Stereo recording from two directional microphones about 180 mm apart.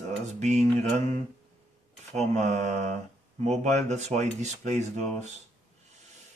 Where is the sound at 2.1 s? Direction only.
40° right (ahead or behind).